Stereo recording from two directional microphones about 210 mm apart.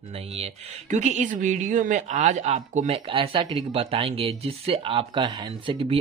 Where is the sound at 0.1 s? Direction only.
30° right (ahead or behind).